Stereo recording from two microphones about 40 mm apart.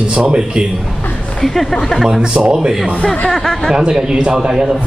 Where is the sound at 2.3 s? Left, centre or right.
Right.